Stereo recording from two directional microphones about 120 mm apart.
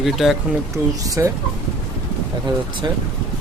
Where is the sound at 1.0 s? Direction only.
30° right (ahead or behind).